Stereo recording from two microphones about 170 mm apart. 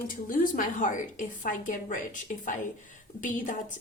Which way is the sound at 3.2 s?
50° left (ahead or behind).